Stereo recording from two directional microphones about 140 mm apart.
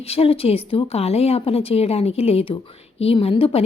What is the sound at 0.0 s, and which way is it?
Speech, 45° left (ahead or behind).